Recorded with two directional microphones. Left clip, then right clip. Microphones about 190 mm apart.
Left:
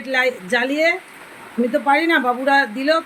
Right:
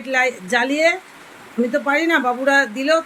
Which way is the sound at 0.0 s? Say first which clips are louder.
Even; centre (ahead or behind).